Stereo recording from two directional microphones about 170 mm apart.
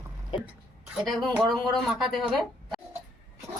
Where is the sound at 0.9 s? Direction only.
Centre (ahead or behind).